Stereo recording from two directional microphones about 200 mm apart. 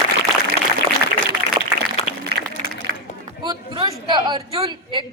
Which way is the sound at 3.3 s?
25° right (ahead or behind).